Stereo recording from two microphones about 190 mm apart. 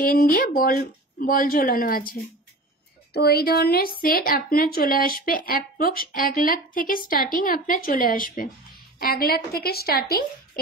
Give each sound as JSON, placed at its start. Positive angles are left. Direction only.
{"t": 0.0, "sound": "a woman's voice", "side_deg": 50}